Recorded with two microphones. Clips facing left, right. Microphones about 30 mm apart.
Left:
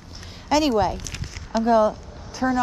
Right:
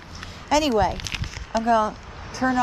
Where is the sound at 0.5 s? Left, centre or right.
Centre.